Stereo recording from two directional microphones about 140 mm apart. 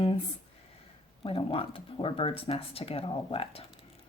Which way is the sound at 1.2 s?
40° left (ahead or behind).